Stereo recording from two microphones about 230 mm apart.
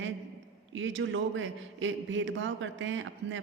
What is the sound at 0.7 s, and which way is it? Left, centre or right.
A man's voice, right.